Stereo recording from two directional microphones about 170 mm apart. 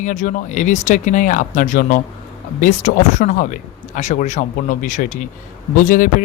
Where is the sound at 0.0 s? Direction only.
45° left (ahead or behind).